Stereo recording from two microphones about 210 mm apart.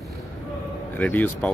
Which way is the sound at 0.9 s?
10° left (ahead or behind).